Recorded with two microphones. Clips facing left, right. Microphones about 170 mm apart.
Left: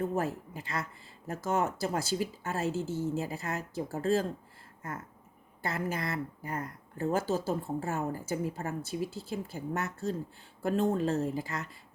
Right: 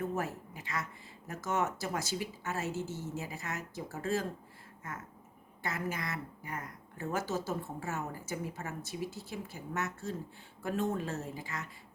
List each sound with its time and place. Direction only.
0.1 s a woman's voice: 30° left (ahead or behind)
5.6 s a woman's voice: 35° left (ahead or behind)